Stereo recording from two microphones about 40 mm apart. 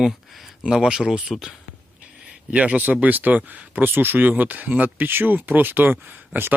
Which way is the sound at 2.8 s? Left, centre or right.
Right.